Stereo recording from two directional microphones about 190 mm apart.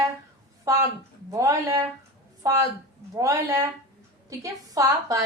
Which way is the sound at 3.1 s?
15° right (ahead or behind).